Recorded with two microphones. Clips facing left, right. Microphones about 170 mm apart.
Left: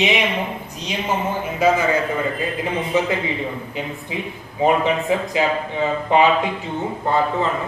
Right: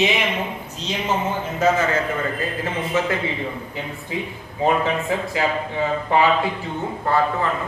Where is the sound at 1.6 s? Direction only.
10° left (ahead or behind).